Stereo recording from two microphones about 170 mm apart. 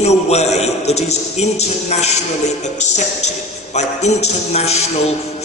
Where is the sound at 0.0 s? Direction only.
40° left (ahead or behind).